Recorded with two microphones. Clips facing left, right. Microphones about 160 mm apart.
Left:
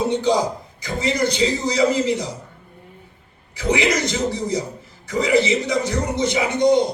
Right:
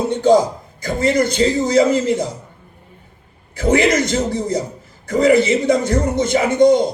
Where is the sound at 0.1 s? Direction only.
50° right (ahead or behind).